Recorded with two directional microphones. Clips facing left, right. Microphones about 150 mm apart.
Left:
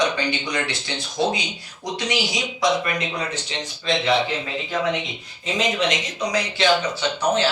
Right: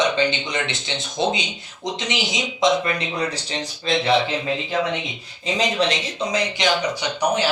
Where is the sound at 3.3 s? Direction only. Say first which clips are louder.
Right 2 dB; 35° right (ahead or behind).